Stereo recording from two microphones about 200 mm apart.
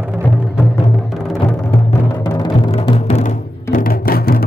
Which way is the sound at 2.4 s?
25° left (ahead or behind).